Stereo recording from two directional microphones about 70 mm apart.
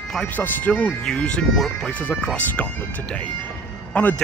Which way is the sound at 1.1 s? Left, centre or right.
Centre.